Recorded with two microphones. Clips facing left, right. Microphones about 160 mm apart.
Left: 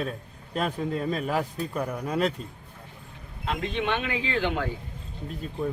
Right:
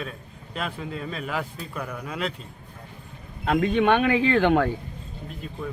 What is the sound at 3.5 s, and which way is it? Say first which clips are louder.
Speech: right 8 dB; 50° right (ahead or behind).